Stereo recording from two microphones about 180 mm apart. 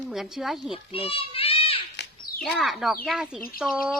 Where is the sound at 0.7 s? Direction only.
30° left (ahead or behind).